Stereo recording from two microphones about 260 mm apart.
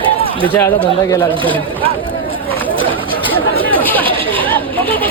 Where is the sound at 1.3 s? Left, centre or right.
Centre.